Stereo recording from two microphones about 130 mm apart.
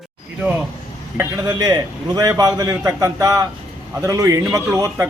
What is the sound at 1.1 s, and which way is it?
A man's voice, 25° right (ahead or behind).